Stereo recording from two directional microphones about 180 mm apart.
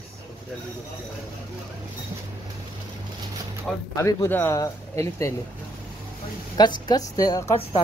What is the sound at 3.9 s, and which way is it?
Speech, 15° left (ahead or behind).